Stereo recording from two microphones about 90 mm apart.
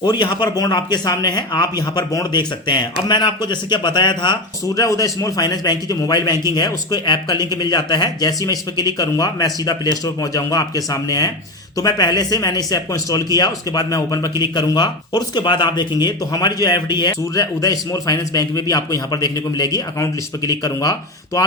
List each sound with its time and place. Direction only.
0.0 s a man's voice: 55° left (ahead or behind)
4.8 s a man's voice: 40° left (ahead or behind)